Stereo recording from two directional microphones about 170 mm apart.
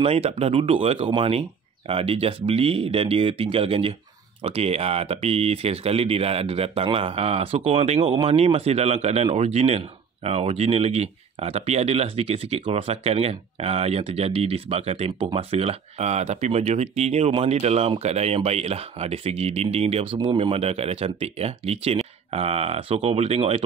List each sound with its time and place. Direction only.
0.0 s speech: 35° right (ahead or behind)